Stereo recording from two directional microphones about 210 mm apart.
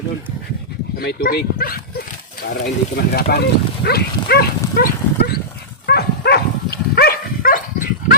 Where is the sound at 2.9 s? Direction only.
50° left (ahead or behind).